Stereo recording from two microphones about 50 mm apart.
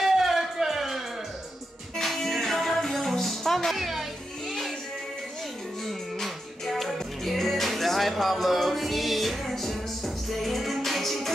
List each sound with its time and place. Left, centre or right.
0.0 s music: centre
5.9 s music: centre